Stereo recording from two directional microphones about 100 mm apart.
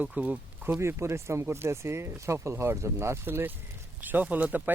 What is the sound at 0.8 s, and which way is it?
Speech, 25° right (ahead or behind).